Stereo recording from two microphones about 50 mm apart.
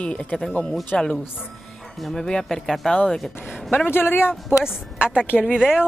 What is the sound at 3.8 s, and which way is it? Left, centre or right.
Speech, left.